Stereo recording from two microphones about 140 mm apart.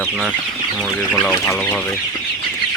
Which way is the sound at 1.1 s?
10° left (ahead or behind).